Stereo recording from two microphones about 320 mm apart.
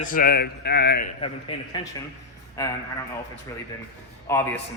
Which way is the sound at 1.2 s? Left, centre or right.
Centre.